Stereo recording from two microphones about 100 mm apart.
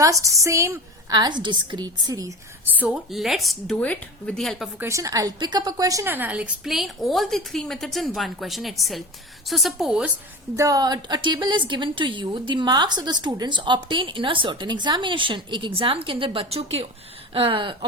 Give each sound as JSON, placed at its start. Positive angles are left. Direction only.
{"t": 0.0, "sound": "a woman's voice", "side_deg": -30}
{"t": 1.1, "sound": "a woman's voice", "side_deg": -45}
{"t": 2.8, "sound": "a woman's voice", "side_deg": 0}
{"t": 3.8, "sound": "speech", "side_deg": 10}
{"t": 4.9, "sound": "a woman's voice", "side_deg": -30}
{"t": 6.1, "sound": "a woman's voice", "side_deg": -20}
{"t": 6.7, "sound": "a woman's voice", "side_deg": 0}
{"t": 10.6, "sound": "a woman's voice", "side_deg": -40}
{"t": 17.3, "sound": "speech", "side_deg": -65}